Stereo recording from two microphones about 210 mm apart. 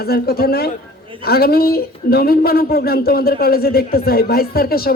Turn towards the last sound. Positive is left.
turn(degrees=45)  # may be behind; listen again after turning